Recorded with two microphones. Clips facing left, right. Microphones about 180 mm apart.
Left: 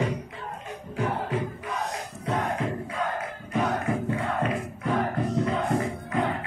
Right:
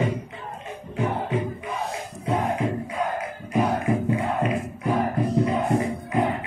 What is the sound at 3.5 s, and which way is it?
Music, 15° right (ahead or behind).